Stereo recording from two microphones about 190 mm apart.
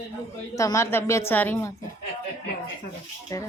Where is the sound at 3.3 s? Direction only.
15° left (ahead or behind).